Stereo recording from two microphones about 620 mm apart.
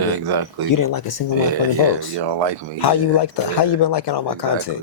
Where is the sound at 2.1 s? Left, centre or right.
Right.